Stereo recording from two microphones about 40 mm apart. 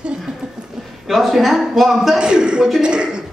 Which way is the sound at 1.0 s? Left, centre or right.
Centre.